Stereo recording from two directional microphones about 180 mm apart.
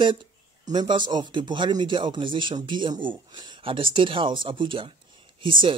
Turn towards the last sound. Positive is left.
turn(degrees=-25)  # may be behind; listen again after turning